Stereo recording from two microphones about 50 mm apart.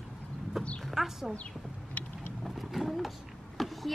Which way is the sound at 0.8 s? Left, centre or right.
Centre.